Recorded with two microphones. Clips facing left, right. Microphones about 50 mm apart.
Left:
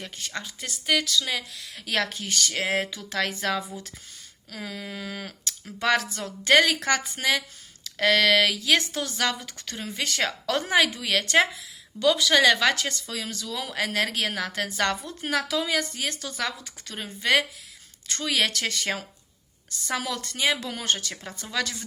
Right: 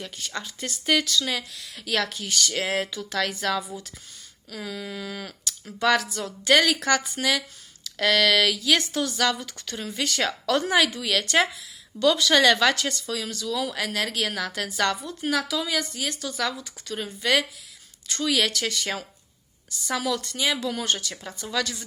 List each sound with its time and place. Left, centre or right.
0.0 s speech: left
0.4 s speech: centre
1.4 s speech: centre
12.7 s a woman's voice: left
19.9 s a woman's voice: left